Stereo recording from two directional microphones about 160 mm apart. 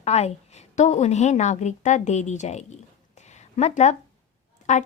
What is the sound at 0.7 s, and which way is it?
A woman's voice, 45° left (ahead or behind).